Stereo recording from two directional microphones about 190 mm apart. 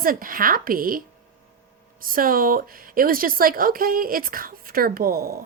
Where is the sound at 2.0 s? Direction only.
50° right (ahead or behind).